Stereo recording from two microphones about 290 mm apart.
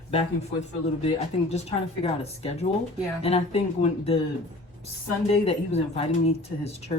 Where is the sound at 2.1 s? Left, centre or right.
Left.